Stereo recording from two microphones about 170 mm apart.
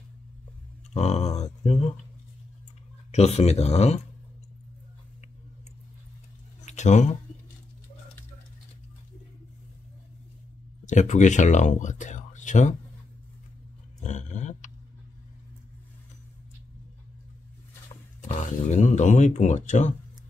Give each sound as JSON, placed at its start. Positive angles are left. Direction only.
{"t": 0.9, "sound": "a sound", "side_deg": 40}
{"t": 3.1, "sound": "speech", "side_deg": 40}
{"t": 6.6, "sound": "a sound", "side_deg": 45}
{"t": 10.9, "sound": "speech", "side_deg": 45}
{"t": 14.0, "sound": "dog", "side_deg": 45}
{"t": 18.2, "sound": "speech", "side_deg": 45}